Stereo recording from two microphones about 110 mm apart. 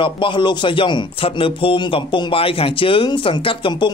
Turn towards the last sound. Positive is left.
turn(degrees=50)  # may be behind; listen again after turning